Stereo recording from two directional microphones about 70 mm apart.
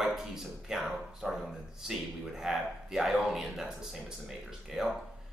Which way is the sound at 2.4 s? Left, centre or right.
Centre.